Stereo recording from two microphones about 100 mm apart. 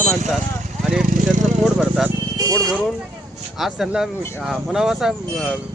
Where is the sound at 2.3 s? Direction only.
40° right (ahead or behind).